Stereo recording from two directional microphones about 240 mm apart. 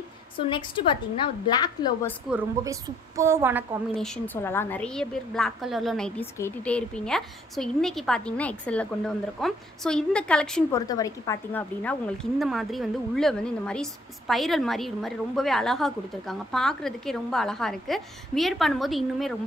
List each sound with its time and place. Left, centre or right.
0.4 s a woman's voice: left
2.3 s a woman's voice: centre
3.9 s a woman's voice: centre
10.9 s a woman's voice: centre